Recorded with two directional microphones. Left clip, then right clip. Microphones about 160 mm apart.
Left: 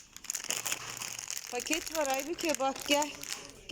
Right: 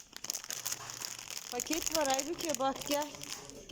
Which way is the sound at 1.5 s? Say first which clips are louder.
Left 3 dB; centre (ahead or behind).